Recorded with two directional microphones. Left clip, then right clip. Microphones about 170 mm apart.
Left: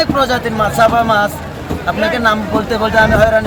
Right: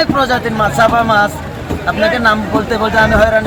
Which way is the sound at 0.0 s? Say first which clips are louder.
Right 1 dB; 20° left (ahead or behind).